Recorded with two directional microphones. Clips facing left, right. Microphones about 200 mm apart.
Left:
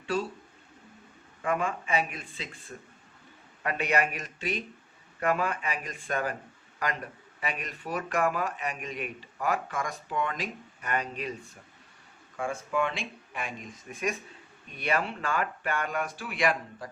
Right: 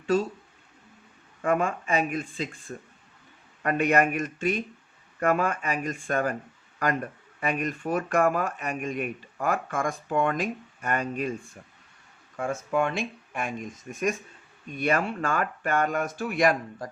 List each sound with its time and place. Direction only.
0.0 s speech: 40° right (ahead or behind)
1.4 s speech: 45° right (ahead or behind)
12.4 s speech: 40° right (ahead or behind)